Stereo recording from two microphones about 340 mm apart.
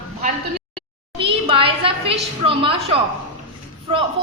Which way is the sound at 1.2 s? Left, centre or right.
Centre.